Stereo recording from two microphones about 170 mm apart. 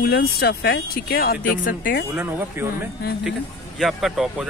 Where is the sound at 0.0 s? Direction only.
65° left (ahead or behind).